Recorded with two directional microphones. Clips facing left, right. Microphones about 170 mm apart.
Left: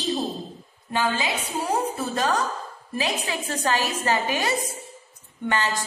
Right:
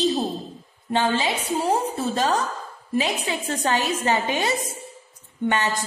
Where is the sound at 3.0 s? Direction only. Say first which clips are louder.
Right 3 dB; 20° right (ahead or behind).